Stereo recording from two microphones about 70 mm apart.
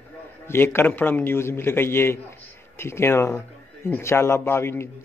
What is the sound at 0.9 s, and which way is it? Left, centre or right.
A man's voice, left.